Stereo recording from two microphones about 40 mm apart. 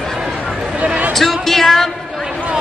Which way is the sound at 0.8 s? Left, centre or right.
Right.